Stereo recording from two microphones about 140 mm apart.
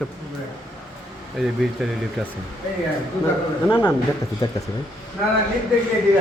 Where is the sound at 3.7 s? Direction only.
15° left (ahead or behind).